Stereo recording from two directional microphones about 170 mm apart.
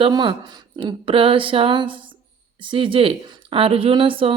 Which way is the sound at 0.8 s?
30° right (ahead or behind).